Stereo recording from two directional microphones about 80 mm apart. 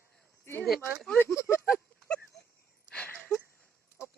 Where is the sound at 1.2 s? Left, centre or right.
Left.